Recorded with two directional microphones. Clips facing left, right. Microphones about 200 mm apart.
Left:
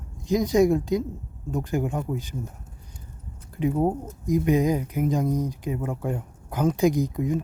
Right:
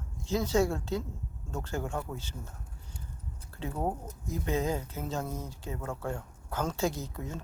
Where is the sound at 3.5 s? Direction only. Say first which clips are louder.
Left 10 dB; 15° left (ahead or behind).